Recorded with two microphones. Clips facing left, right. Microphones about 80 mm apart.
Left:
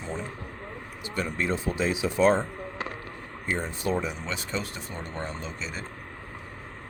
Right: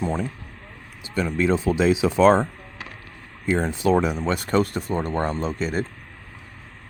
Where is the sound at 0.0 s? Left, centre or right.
Right.